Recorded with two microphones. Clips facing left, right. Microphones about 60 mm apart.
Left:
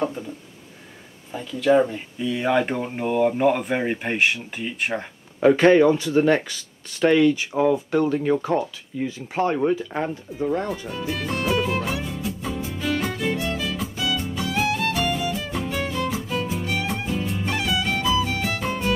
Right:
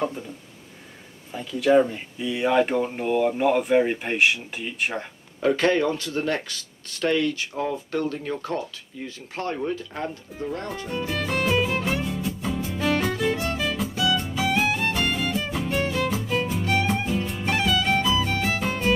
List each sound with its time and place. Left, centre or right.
1.3 s speech: centre
5.6 s speech: left
10.9 s speech: centre
11.4 s music: centre